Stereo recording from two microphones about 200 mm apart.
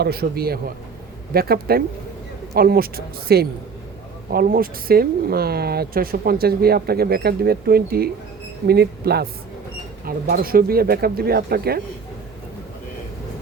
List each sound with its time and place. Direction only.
0.0 s speech: 50° right (ahead or behind)
10.2 s speech: 45° right (ahead or behind)